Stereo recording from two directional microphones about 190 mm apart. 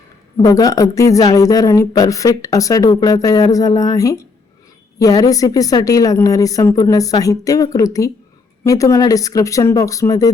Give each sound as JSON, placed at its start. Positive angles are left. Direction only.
{"t": 0.3, "sound": "a woman's voice", "side_deg": 20}